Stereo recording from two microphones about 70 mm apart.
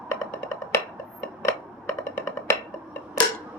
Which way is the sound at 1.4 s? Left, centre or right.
Left.